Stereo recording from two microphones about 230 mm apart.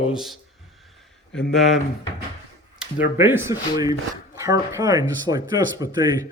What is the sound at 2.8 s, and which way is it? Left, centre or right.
A man's voice, centre.